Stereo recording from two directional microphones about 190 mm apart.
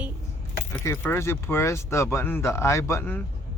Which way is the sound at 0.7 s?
10° left (ahead or behind).